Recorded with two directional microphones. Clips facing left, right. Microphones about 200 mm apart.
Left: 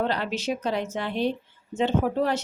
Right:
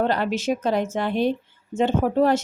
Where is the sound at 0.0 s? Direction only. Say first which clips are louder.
Right 4 dB; 50° right (ahead or behind).